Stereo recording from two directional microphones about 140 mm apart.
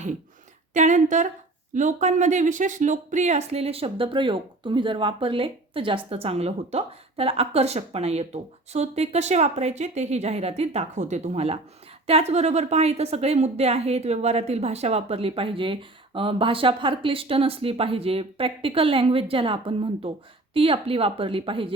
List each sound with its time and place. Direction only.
0.7 s a woman's voice: 60° right (ahead or behind); by 21.8 s 40° right (ahead or behind)